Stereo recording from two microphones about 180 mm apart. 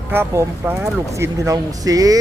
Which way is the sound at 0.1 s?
10° right (ahead or behind).